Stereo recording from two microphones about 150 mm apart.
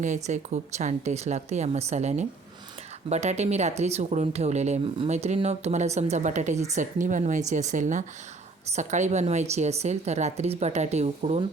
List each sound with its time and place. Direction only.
0.0 s speech: 55° right (ahead or behind)